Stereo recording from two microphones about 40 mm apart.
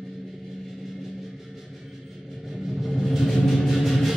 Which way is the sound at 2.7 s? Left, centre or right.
Centre.